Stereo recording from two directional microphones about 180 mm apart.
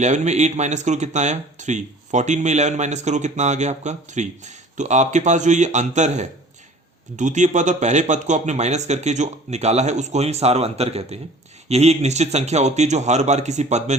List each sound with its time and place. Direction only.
0.0 s speech: 40° right (ahead or behind)